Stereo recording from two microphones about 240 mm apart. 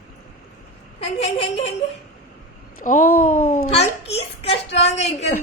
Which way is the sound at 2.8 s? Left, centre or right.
Left.